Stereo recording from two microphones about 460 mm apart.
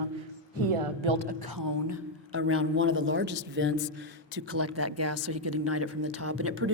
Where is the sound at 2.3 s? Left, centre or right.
Right.